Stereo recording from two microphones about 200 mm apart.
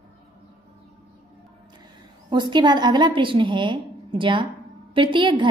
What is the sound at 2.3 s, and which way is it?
A woman's voice, 20° right (ahead or behind).